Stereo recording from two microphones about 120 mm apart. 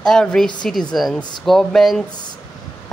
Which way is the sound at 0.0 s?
5° left (ahead or behind).